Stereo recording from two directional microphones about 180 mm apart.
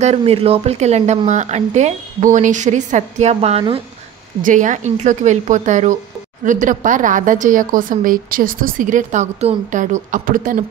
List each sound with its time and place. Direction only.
0.0 s a woman's voice: 35° right (ahead or behind)
4.4 s a woman's voice: 45° right (ahead or behind)